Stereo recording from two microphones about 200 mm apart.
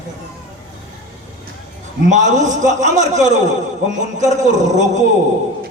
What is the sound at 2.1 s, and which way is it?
A man's voice, 40° right (ahead or behind).